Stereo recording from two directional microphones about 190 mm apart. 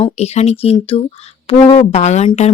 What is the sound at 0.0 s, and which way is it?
Speech, 35° left (ahead or behind).